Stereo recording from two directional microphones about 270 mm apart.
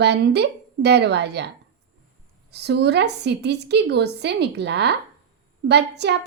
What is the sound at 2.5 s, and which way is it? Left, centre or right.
A woman's voice, right.